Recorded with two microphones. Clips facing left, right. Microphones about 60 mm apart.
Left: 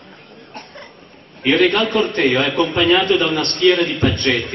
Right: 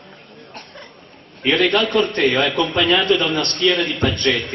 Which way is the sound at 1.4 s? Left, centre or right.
Centre.